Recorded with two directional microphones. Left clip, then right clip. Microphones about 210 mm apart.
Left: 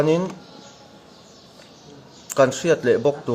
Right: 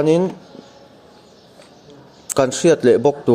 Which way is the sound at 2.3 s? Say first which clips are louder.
Right 3 dB; 30° right (ahead or behind).